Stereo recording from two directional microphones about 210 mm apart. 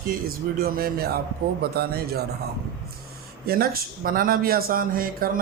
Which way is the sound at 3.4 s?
45° right (ahead or behind).